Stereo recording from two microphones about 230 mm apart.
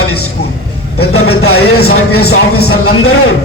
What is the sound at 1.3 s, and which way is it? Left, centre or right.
Speech, left.